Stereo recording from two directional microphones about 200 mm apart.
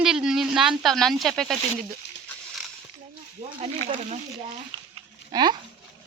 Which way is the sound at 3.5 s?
30° right (ahead or behind).